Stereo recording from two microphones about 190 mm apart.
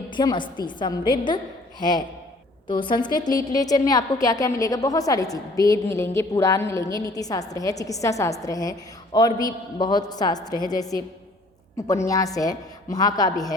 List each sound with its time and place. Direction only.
0.1 s a woman's voice: 25° left (ahead or behind)